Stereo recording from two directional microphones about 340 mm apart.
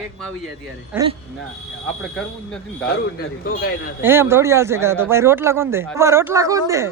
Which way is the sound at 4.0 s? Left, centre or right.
Centre.